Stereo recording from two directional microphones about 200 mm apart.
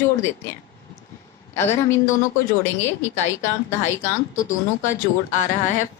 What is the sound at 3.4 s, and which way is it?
Speech, 15° left (ahead or behind).